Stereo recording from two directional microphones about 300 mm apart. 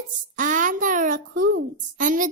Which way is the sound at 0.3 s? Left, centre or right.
Right.